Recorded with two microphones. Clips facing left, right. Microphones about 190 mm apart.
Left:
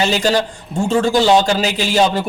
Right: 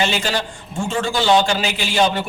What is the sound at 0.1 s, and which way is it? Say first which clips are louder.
A man's voice: left 6 dB; 40° left (ahead or behind).